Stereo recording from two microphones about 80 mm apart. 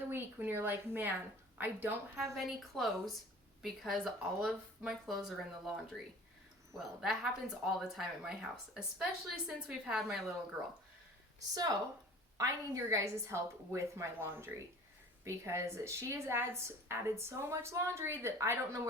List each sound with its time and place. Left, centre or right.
0.1 s speech: right
2.3 s speech: centre
11.3 s speech: right
12.4 s a woman's voice: right